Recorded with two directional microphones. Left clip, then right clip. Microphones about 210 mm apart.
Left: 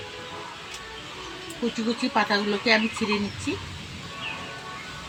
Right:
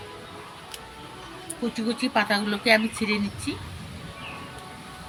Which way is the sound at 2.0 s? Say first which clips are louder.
Even; 20° right (ahead or behind).